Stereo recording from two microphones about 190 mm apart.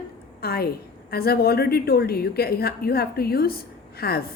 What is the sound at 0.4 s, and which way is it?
A woman's voice, 55° left (ahead or behind).